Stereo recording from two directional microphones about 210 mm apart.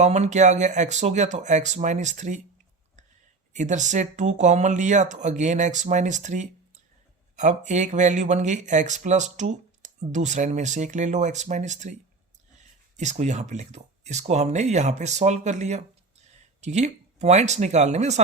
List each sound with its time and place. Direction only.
0.0 s speech: 35° right (ahead or behind)
3.5 s speech: 35° right (ahead or behind)
13.0 s speech: 35° right (ahead or behind)